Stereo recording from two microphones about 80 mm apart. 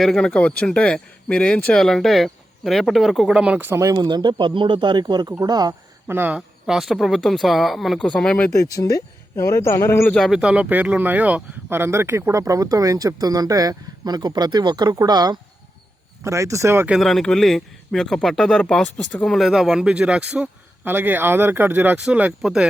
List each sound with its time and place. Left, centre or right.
0.0 s speech: centre
1.8 s a man's voice: centre; by 3.8 s right
3.8 s speech: right
5.4 s speech: right
6.1 s speech: right
6.3 s a man's voice: centre
8.0 s speech: centre
8.5 s a man's voice: left
10.2 s speech: centre; by 14.9 s right
14.9 s speech: right
16.2 s speech: right
16.9 s a man's voice: centre
20.8 s speech: right; by 22.6 s centre